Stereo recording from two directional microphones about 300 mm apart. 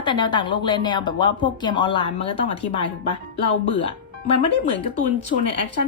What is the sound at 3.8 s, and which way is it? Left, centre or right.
Speech, centre.